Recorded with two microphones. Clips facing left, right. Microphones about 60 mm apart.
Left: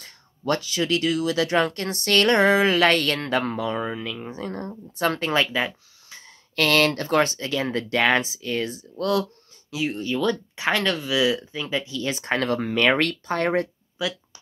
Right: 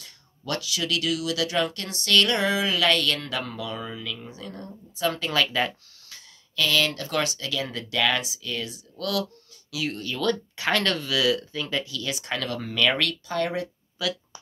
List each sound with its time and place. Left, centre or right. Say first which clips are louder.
0.0 s speech: left 9 dB; left
5.5 s speech: left 1 dB; centre
6.5 s speech: left 5 dB; left
7.1 s speech: left 6 dB; left
14.0 s speech: left 1 dB; left